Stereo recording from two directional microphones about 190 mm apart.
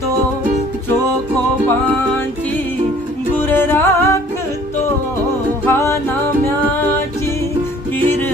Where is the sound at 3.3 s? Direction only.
10° left (ahead or behind).